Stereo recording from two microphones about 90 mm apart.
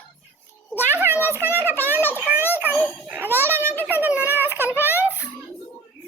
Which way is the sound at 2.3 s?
25° right (ahead or behind).